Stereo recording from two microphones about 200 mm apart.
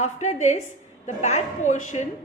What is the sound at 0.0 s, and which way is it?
A woman's voice, 35° left (ahead or behind).